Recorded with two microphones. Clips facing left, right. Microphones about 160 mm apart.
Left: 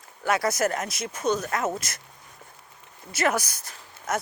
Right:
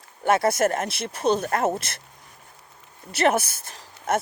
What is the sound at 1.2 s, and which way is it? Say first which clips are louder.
Speech: right 4 dB; 30° right (ahead or behind).